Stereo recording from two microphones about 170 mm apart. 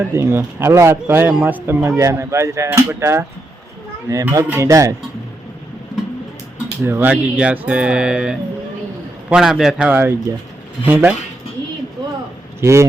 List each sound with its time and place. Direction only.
0.1 s speech: 15° right (ahead or behind)
6.8 s a man's voice: 10° right (ahead or behind)
12.5 s speech: 15° right (ahead or behind)